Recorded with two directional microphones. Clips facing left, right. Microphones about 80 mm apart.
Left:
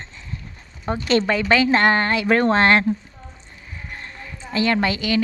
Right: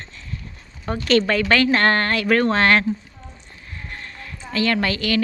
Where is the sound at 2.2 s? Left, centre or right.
Left.